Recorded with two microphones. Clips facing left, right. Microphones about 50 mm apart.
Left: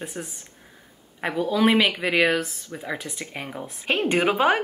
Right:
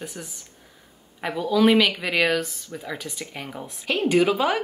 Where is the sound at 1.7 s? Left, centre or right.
Left.